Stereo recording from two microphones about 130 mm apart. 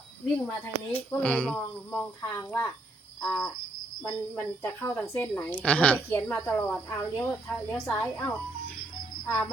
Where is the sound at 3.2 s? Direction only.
15° left (ahead or behind).